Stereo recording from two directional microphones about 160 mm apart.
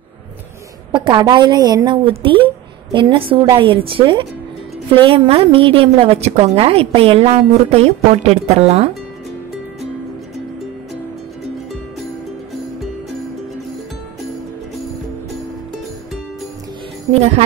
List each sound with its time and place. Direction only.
0.9 s a woman's voice: 30° right (ahead or behind)